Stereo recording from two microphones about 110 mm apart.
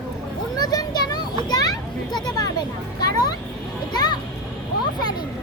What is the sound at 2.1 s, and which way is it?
A child's voice, 40° left (ahead or behind).